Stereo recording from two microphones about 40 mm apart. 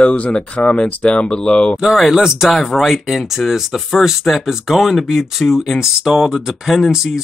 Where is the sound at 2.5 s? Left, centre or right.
Centre.